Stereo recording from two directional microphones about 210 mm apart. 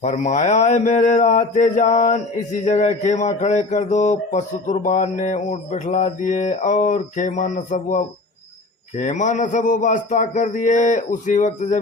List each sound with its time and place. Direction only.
0.0 s speech: 35° left (ahead or behind)